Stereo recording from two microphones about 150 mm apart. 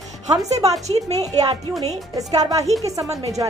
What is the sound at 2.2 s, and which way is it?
Speech, 25° right (ahead or behind).